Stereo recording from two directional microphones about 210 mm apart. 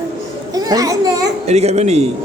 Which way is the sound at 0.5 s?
15° right (ahead or behind).